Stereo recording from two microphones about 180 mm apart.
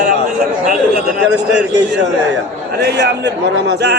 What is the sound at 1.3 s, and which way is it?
A man's voice, 75° right (ahead or behind).